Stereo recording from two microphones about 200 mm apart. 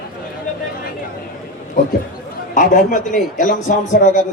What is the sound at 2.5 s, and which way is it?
A man's voice, 40° left (ahead or behind).